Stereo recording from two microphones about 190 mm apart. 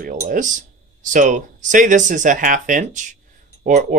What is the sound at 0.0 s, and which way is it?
Speech, 45° right (ahead or behind).